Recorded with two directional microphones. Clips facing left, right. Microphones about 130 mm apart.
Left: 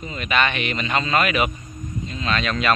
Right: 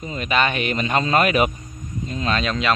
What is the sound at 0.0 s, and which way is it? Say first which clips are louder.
Speech: right 1 dB; 35° right (ahead or behind).